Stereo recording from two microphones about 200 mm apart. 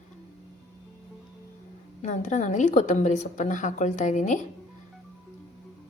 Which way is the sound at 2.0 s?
40° left (ahead or behind).